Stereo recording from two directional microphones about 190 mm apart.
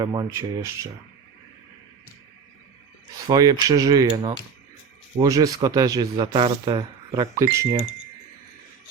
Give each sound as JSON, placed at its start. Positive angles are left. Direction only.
{"t": 0.0, "sound": "speech", "side_deg": -20}
{"t": 3.2, "sound": "speech", "side_deg": -20}